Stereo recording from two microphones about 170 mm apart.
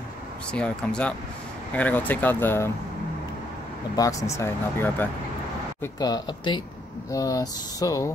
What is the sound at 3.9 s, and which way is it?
Speech, 20° left (ahead or behind).